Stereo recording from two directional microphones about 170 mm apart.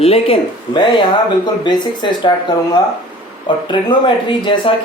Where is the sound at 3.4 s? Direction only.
30° left (ahead or behind).